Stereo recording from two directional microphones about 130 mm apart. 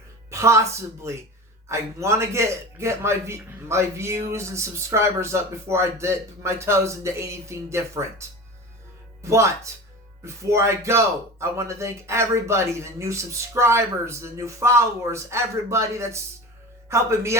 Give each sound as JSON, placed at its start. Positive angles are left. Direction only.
{"t": 0.3, "sound": "music", "side_deg": -20}
{"t": 1.6, "sound": "a man's voice", "side_deg": -20}
{"t": 9.2, "sound": "a man's voice", "side_deg": -20}